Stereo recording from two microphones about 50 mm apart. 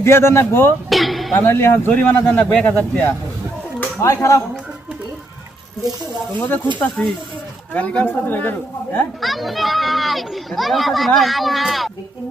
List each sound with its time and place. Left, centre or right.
0.0 s speech: left
0.9 s a sound: centre
1.4 s a man's voice: left
1.9 s speech: left
4.0 s speech: left
6.4 s speech: left
9.2 s a child's voice: centre